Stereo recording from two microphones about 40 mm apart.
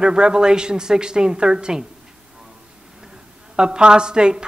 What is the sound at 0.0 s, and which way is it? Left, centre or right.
A woman's voice, centre.